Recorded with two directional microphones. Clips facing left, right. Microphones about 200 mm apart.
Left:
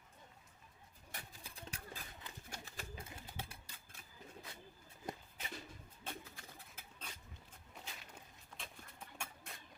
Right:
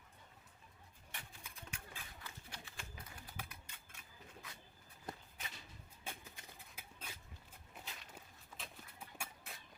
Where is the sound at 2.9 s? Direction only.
25° left (ahead or behind).